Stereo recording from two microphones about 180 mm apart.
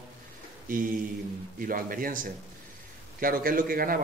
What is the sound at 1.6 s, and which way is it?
Speech, 50° right (ahead or behind).